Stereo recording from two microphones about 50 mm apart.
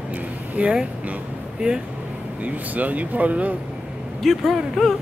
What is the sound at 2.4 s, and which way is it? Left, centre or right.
Speech, right.